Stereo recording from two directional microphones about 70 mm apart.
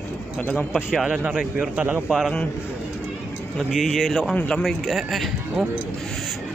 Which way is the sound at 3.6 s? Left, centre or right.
Centre.